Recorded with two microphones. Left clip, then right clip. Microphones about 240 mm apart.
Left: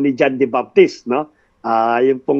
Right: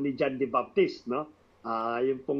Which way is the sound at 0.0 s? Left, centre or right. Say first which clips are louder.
Left 14 dB; left.